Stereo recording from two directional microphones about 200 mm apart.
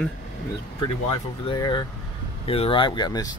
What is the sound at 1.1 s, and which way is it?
Speech, 25° left (ahead or behind).